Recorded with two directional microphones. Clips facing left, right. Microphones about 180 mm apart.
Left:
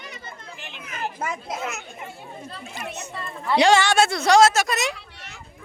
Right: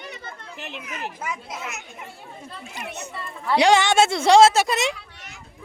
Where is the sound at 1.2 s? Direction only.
50° left (ahead or behind).